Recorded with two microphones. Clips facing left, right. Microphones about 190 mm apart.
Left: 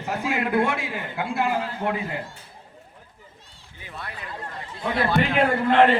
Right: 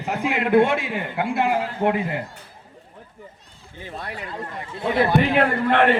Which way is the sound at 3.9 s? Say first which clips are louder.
Right 4 dB; 35° right (ahead or behind).